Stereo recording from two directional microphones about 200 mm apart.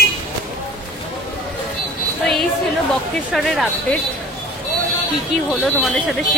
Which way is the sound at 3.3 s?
Centre (ahead or behind).